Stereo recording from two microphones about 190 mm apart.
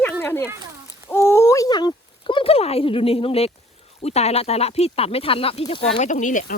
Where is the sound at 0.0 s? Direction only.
10° left (ahead or behind).